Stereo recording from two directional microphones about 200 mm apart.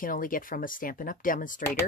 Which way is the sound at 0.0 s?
45° left (ahead or behind).